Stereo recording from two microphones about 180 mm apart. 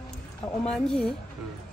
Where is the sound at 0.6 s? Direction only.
5° left (ahead or behind).